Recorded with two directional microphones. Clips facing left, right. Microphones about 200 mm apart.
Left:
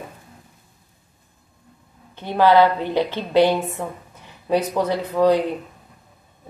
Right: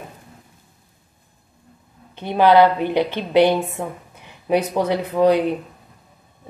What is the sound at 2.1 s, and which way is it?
A woman's voice, 15° right (ahead or behind).